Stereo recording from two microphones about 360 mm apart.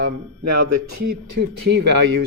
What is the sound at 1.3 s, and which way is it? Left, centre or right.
Speech, right.